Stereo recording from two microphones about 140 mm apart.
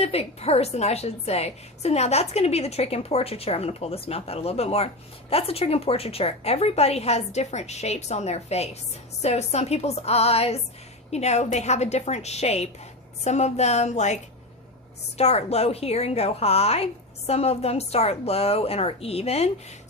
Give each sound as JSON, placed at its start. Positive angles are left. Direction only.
{"t": 0.0, "sound": "a woman's voice", "side_deg": 45}
{"t": 15.2, "sound": "a woman's voice", "side_deg": 50}